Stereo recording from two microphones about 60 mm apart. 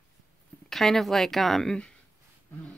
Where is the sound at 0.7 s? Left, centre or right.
Centre.